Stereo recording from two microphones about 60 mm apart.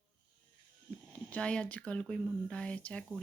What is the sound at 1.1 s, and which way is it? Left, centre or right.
Speech, left.